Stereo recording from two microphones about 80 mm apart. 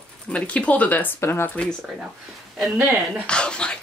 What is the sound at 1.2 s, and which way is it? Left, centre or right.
Speech, left.